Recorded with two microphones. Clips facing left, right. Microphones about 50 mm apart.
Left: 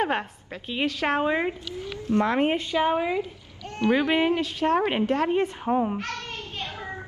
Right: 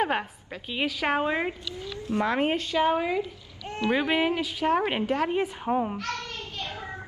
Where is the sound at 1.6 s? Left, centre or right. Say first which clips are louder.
Left 2 dB; left.